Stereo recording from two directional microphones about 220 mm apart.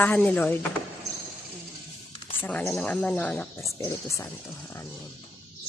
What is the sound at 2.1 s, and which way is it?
Music, 25° left (ahead or behind).